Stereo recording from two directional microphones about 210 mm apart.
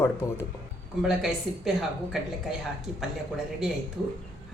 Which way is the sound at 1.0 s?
Centre (ahead or behind).